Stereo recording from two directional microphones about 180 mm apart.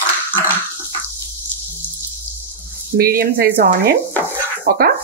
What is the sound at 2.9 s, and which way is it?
Speech, 55° right (ahead or behind).